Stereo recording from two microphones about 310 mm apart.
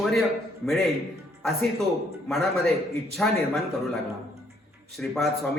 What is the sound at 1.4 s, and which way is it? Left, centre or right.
Speech, centre.